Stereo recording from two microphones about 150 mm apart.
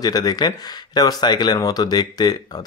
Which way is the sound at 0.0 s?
25° left (ahead or behind).